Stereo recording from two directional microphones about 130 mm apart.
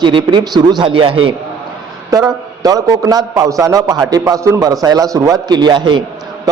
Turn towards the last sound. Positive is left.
turn(degrees=-35)  # may be behind; listen again after turning